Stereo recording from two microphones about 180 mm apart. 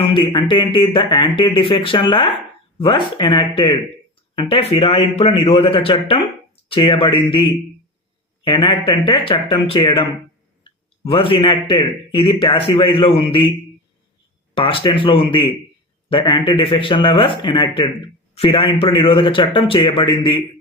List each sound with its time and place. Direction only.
0.0 s speech: 25° left (ahead or behind)
10.6 s a sound: 30° left (ahead or behind)
11.7 s speech: 30° left (ahead or behind)
14.5 s speech: 30° left (ahead or behind)